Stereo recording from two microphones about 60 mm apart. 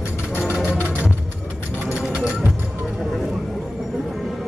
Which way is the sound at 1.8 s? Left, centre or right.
Centre.